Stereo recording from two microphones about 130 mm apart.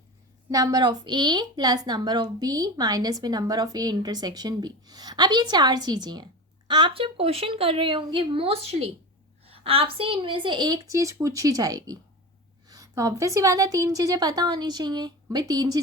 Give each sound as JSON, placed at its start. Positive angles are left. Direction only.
{"t": 0.5, "sound": "a woman's voice", "side_deg": -25}